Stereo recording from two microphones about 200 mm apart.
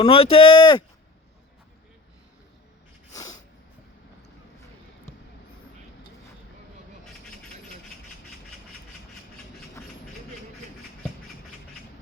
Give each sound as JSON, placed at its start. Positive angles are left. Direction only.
{"t": 0.0, "sound": "speech", "side_deg": 25}
{"t": 3.1, "sound": "sneeze", "side_deg": 20}